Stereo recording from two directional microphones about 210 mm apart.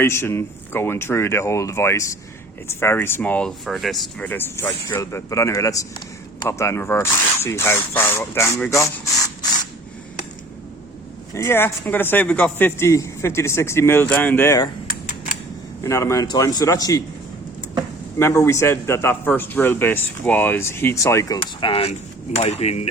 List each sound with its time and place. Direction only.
0.0 s a man's voice: 10° left (ahead or behind)
11.3 s a man's voice: 10° left (ahead or behind)
15.8 s a man's voice: 15° left (ahead or behind)
18.2 s a man's voice: 15° left (ahead or behind)
21.3 s mechanisms: 25° left (ahead or behind)